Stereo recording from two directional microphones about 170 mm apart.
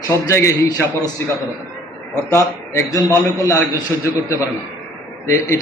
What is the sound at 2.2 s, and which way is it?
A man's voice, 15° left (ahead or behind).